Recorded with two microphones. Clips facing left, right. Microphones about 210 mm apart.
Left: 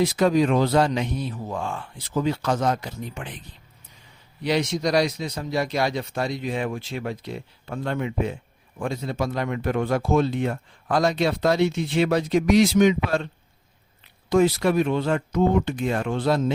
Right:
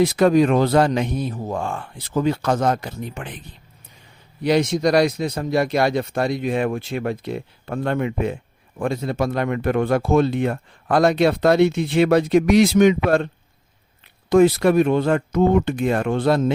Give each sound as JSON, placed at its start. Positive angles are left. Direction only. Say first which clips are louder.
{"t": 0.0, "sound": "speech", "louder": "right 4 dB", "side_deg": -55}
{"t": 4.4, "sound": "speech", "louder": "right 5 dB", "side_deg": -50}
{"t": 14.3, "sound": "speech", "louder": "right 5 dB", "side_deg": -55}